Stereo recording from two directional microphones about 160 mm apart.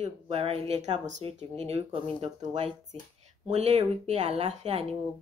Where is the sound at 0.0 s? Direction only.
40° right (ahead or behind).